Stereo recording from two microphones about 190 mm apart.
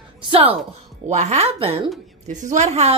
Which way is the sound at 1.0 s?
35° right (ahead or behind).